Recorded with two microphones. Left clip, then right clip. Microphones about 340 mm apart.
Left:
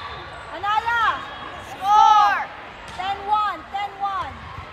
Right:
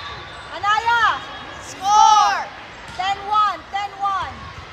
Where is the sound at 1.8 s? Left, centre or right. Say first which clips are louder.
Right 1 dB; centre.